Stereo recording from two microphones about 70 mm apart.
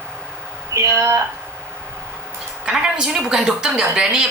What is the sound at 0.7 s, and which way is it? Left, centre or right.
Speech, right.